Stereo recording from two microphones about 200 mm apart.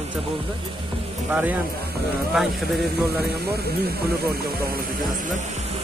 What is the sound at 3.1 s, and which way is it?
Speech, 50° right (ahead or behind).